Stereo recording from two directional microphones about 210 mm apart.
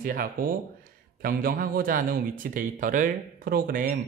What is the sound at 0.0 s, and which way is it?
Speech, 45° right (ahead or behind).